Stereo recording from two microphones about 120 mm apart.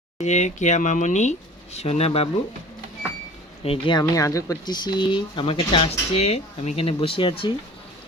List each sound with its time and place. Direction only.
0.2 s speech: 80° left; by 2.3 s 60° left (ahead or behind)
3.6 s speech: 55° left (ahead or behind)
3.9 s speech: 30° left (ahead or behind); by 7.5 s 45° left (ahead or behind)